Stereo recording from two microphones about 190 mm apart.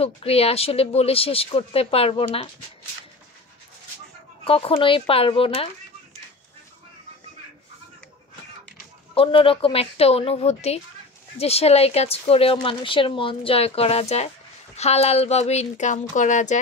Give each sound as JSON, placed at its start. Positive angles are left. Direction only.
{"t": 0.0, "sound": "speech", "side_deg": 30}
{"t": 4.5, "sound": "speech", "side_deg": 30}
{"t": 9.1, "sound": "speech", "side_deg": 30}